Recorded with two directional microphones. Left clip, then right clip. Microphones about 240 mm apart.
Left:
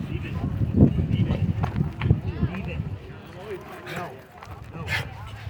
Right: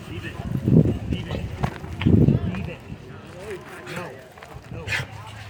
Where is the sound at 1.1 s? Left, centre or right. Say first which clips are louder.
Left 1 dB; right.